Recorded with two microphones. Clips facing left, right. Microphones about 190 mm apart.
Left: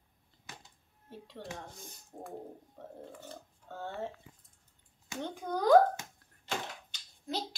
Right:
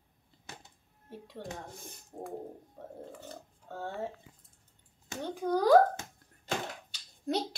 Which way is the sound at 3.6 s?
10° right (ahead or behind).